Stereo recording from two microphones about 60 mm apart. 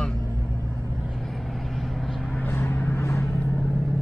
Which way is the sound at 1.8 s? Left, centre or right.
Centre.